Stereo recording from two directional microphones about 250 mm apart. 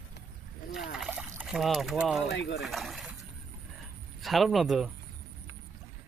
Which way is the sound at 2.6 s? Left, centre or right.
Centre.